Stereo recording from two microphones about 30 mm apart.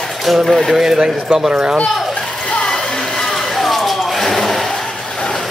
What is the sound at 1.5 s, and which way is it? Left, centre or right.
Speech, right.